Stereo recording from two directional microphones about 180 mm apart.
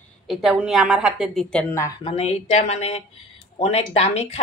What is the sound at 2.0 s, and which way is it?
Speech, 35° left (ahead or behind).